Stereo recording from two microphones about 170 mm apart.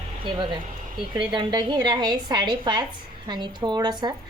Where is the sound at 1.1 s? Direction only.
25° right (ahead or behind).